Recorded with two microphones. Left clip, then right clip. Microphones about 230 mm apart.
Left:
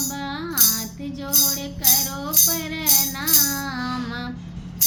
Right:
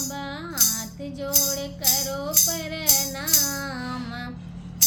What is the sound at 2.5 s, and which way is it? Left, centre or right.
Music, centre.